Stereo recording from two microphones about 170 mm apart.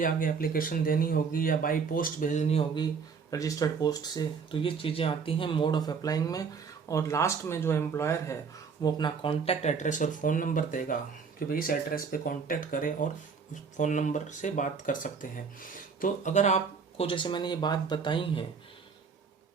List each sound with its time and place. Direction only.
0.0 s speech: 55° left (ahead or behind); by 8.4 s 15° left (ahead or behind)
8.8 s speech: 25° left (ahead or behind); by 16.6 s 45° left (ahead or behind)
17.0 s speech: 30° left (ahead or behind)